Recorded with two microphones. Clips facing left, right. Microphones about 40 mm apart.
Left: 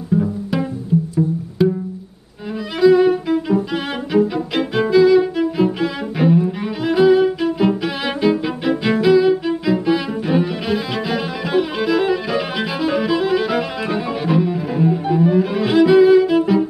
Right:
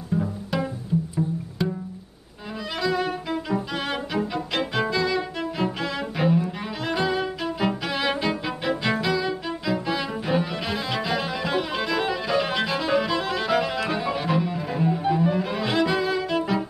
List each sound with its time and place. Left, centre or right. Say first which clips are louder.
0.1 s pizzicato: left 7 dB; centre
0.9 s pizzicato: left 8 dB; left
1.6 s music: left 11 dB; centre
2.8 s music: left 14 dB; centre
9.0 s cello: left 12 dB; centre